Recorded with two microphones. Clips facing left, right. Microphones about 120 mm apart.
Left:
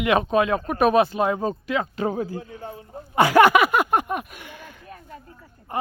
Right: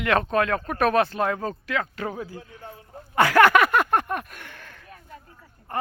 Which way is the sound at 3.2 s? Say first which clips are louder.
Left 2 dB; 15° left (ahead or behind).